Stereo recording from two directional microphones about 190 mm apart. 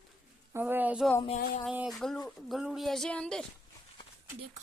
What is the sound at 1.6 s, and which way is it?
Turkey, 5° right (ahead or behind).